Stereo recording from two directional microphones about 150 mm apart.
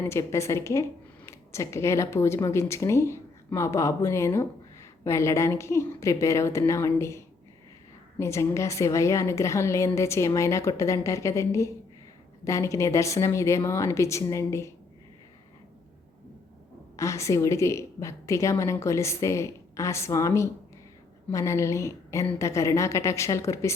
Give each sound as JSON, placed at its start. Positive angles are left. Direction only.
{"t": 0.0, "sound": "speech", "side_deg": 20}
{"t": 17.0, "sound": "speech", "side_deg": 20}